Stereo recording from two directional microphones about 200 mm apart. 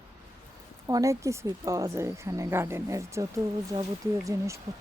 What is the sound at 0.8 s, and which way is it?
Speech, 15° right (ahead or behind).